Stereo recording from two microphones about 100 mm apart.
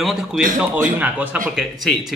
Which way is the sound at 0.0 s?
5° right (ahead or behind).